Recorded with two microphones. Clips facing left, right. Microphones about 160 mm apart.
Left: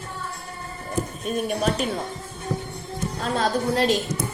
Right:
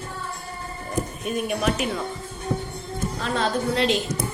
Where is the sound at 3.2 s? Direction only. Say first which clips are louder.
Left 1 dB; 45° left (ahead or behind).